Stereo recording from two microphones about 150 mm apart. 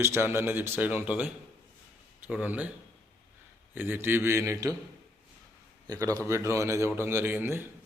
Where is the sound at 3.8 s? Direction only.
15° right (ahead or behind).